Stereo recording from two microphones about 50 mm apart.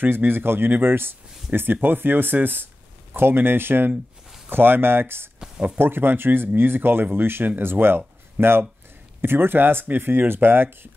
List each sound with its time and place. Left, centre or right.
0.0 s speech: right